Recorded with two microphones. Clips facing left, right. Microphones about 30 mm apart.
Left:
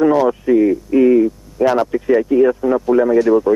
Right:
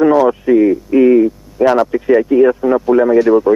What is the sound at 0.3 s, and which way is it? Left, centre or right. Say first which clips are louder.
Speech: right 3 dB; centre.